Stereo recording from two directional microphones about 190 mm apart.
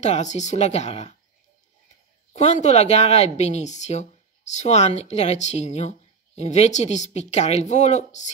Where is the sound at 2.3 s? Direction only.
35° left (ahead or behind).